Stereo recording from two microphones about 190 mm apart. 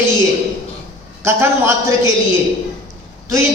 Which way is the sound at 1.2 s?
15° right (ahead or behind).